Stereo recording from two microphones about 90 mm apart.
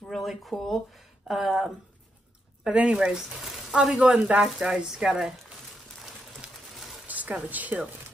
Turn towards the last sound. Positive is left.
turn(degrees=-15)  # may be behind; listen again after turning